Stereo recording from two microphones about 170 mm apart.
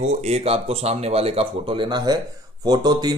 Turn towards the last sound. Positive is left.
turn(degrees=-25)  # may be behind; listen again after turning